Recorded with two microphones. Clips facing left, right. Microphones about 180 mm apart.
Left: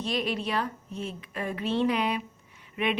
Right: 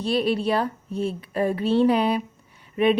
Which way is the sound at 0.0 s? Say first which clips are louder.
Right 7 dB; 35° right (ahead or behind).